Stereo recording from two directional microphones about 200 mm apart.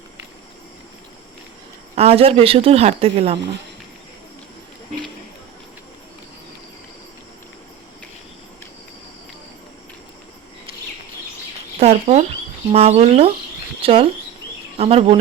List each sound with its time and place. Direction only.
2.0 s speech: 30° right (ahead or behind)
11.8 s speech: 30° right (ahead or behind)